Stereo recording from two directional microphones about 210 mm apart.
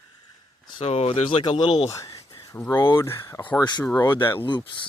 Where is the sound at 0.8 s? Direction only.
25° left (ahead or behind).